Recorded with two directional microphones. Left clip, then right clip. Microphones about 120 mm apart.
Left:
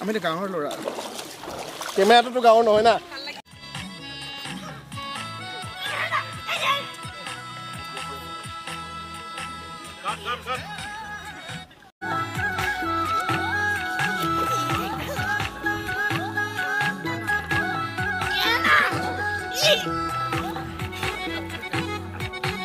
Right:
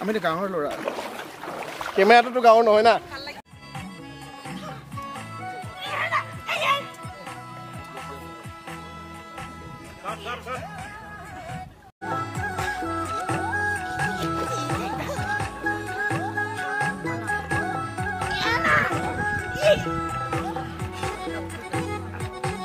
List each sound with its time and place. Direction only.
0.0 s speech: 5° right (ahead or behind)
1.6 s rowboat: 25° left (ahead or behind)
2.0 s speech: 5° left (ahead or behind)
5.8 s music: centre (ahead or behind)
10.0 s music: 25° left (ahead or behind)
12.0 s music: 40° left (ahead or behind)
18.3 s music: 15° left (ahead or behind); by 22.6 s 35° left (ahead or behind)